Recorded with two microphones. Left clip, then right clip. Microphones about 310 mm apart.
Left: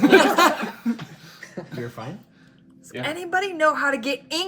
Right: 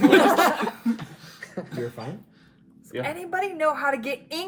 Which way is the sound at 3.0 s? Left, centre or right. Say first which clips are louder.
Left 3 dB; left.